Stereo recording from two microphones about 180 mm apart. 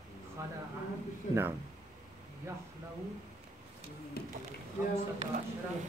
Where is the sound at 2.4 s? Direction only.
15° right (ahead or behind).